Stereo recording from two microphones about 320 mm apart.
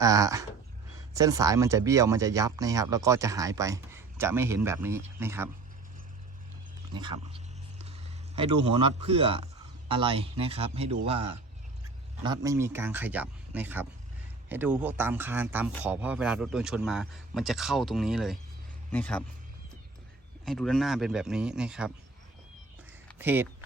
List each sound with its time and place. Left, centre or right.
0.0 s speech: centre
6.9 s a sound: centre
8.4 s speech: centre
20.4 s speech: centre
23.1 s speech: centre